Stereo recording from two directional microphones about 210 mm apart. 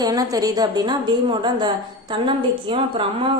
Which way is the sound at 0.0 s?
20° right (ahead or behind).